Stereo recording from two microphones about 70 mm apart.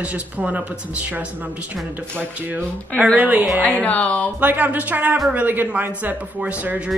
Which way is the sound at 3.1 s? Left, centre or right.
Right.